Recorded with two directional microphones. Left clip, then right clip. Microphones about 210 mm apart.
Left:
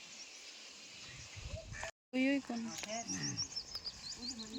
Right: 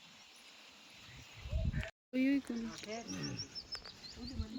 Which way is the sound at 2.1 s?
Centre (ahead or behind).